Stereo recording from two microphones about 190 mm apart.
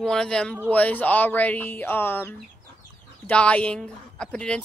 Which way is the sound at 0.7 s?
10° left (ahead or behind).